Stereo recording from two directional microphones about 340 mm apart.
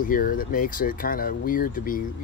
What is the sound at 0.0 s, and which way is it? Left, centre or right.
Speech, left.